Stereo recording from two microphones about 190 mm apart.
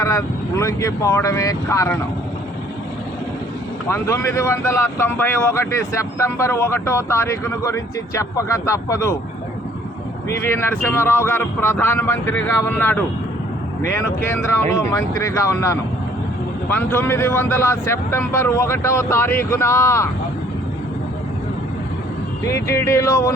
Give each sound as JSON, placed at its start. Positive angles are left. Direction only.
{"t": 0.0, "sound": "speech", "side_deg": 15}
{"t": 3.8, "sound": "speech", "side_deg": 15}
{"t": 10.2, "sound": "speech", "side_deg": 15}
{"t": 22.4, "sound": "speech", "side_deg": 15}